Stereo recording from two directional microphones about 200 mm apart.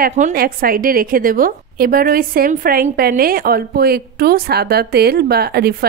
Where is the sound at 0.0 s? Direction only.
40° right (ahead or behind).